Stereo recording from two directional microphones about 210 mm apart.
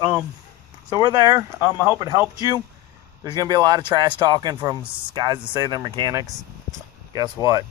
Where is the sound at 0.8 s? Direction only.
20° right (ahead or behind).